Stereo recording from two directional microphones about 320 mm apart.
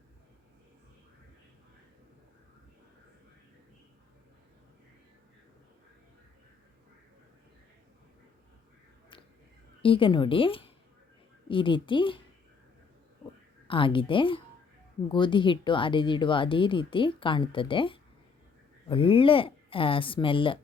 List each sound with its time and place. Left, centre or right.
9.8 s speech: centre
13.7 s speech: centre